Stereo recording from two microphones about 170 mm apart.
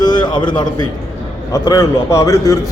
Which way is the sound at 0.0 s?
25° left (ahead or behind).